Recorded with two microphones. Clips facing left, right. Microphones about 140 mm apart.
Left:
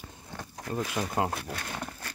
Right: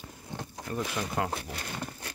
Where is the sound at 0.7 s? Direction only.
25° left (ahead or behind).